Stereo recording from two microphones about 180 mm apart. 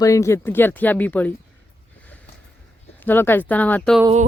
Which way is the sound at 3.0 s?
10° left (ahead or behind).